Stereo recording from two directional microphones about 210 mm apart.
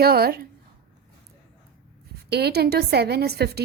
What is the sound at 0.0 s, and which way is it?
Speech, 45° right (ahead or behind).